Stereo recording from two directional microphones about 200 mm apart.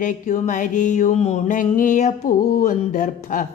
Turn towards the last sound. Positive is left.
turn(degrees=40)  # may be behind; listen again after turning